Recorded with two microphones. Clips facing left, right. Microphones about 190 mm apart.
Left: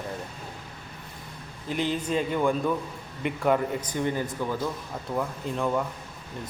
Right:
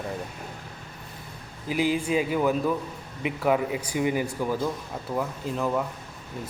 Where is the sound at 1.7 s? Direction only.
10° right (ahead or behind).